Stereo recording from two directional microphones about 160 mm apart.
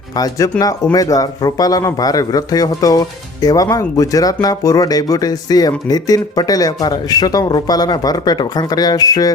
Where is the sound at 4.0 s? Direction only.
20° left (ahead or behind).